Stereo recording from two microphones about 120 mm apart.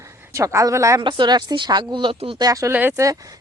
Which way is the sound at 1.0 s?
40° right (ahead or behind).